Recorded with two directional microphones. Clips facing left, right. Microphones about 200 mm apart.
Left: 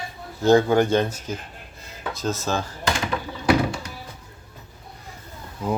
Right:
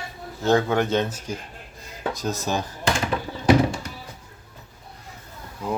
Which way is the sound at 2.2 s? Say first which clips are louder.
Left 3 dB; 15° right (ahead or behind).